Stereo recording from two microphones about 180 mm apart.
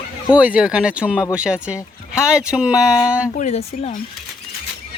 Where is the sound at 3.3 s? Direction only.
40° left (ahead or behind).